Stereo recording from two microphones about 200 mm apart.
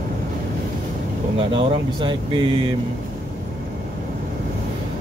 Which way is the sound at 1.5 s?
25° right (ahead or behind).